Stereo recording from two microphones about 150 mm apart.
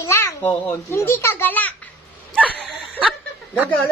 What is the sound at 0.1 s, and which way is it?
A child's voice, 15° left (ahead or behind).